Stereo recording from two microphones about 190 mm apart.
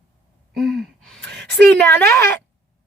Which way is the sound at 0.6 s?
Centre (ahead or behind).